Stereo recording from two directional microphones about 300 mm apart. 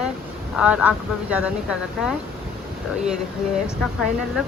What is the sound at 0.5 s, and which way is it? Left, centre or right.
Speech, centre.